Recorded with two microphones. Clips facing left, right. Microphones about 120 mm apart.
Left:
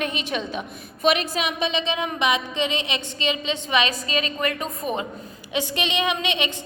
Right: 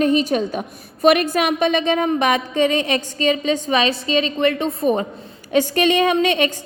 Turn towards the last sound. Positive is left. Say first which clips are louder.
# right 8 dB
turn(degrees=-45)  # may be behind; listen again after turning